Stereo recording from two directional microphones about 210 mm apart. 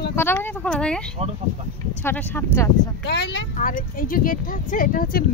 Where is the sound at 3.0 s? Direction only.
55° left (ahead or behind).